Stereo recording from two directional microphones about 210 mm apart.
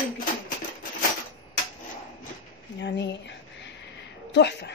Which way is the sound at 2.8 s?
55° left (ahead or behind).